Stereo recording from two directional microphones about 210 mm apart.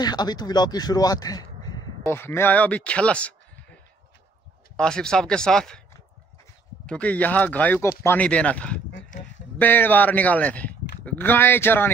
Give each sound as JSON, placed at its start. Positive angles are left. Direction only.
{"t": 0.0, "sound": "speech", "side_deg": 20}
{"t": 4.7, "sound": "speech", "side_deg": 5}
{"t": 6.9, "sound": "speech", "side_deg": 5}